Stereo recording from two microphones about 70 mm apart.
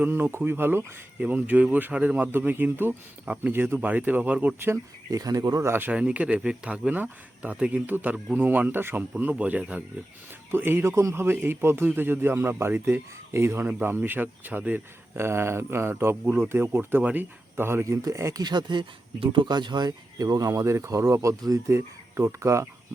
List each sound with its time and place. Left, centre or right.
0.0 s speech: right
1.2 s speech: right
5.1 s speech: right
5.6 s speech: right
5.9 s speech: centre; by 9.0 s right
9.1 s speech: centre
10.5 s speech: right
10.8 s speech: right
11.1 s speech: right
13.7 s speech: right
17.0 s speech: right
17.6 s speech: right
18.4 s speech: right